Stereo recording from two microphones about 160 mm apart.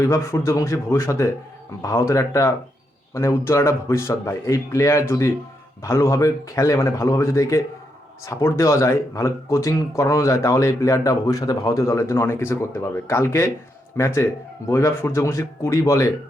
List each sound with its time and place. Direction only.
0.1 s a man's voice: 15° left (ahead or behind)